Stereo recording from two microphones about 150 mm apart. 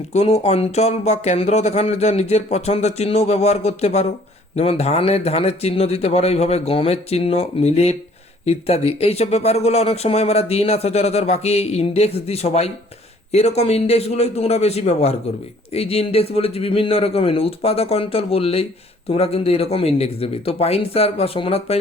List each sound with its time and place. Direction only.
0.1 s a man's voice: 45° left (ahead or behind)